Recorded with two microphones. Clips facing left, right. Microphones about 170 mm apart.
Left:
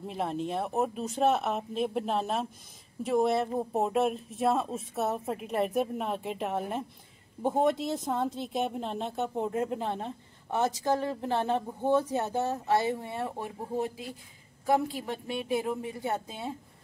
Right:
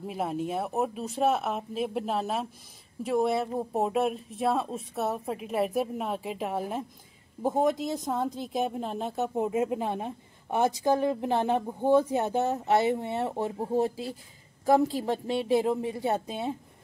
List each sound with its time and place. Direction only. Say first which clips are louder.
0.0 s a woman's voice: right 1 dB; 5° right (ahead or behind); by 16.5 s 20° right (ahead or behind)